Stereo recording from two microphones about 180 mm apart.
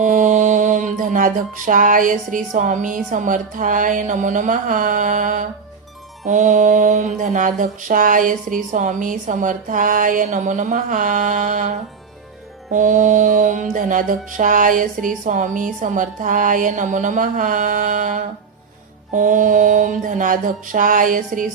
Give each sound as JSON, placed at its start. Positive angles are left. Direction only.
{"t": 0.0, "sound": "mantra", "side_deg": -45}
{"t": 12.7, "sound": "mantra", "side_deg": -45}